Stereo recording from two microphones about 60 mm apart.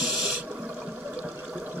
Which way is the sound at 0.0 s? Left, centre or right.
Centre.